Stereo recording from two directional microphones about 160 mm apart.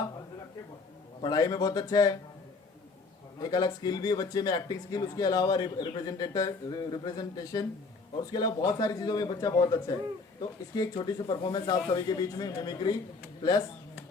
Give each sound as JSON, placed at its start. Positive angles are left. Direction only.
{"t": 1.2, "sound": "a man's voice", "side_deg": 25}
{"t": 3.4, "sound": "a man's voice", "side_deg": 25}